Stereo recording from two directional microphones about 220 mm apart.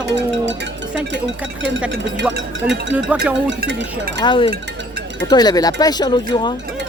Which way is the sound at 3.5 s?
50° right (ahead or behind).